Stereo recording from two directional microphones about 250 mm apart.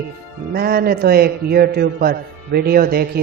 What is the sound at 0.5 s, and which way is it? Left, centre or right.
A man's voice, right.